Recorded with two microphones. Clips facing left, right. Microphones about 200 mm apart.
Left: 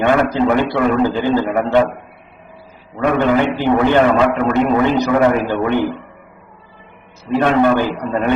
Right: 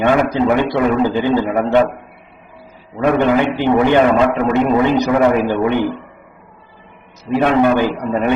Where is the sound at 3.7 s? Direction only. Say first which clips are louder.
Right 1 dB; 15° right (ahead or behind).